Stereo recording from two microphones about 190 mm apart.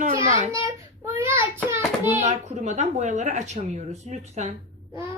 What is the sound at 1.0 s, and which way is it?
Child singing, 15° right (ahead or behind).